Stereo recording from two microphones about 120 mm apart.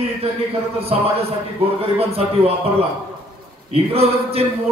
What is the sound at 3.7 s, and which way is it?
Mantra, 55° right (ahead or behind).